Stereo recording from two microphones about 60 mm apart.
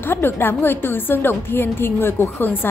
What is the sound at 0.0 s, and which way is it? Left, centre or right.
A woman's voice, left.